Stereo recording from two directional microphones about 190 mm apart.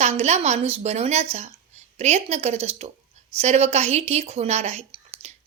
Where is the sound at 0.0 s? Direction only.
35° right (ahead or behind).